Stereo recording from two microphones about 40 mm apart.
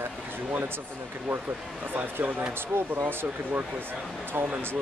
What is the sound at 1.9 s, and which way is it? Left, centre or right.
Speech, right.